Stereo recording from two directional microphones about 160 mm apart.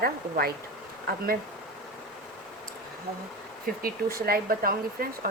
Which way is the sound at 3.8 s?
65° right (ahead or behind).